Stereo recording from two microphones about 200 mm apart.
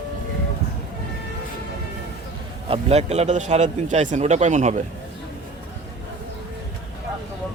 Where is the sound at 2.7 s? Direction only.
30° right (ahead or behind).